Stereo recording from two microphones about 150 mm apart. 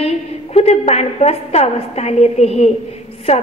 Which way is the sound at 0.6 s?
45° left (ahead or behind).